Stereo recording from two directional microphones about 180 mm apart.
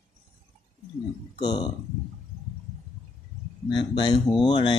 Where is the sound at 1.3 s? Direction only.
25° left (ahead or behind).